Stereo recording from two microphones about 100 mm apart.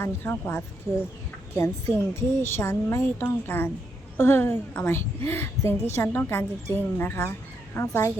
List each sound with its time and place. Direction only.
0.0 s a woman's voice: 20° left (ahead or behind)